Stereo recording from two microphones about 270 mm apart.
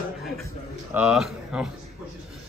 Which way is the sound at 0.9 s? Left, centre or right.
Centre.